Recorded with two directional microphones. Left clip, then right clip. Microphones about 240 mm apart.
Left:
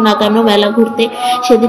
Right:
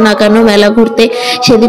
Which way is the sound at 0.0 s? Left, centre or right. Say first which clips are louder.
Right 4 dB; right.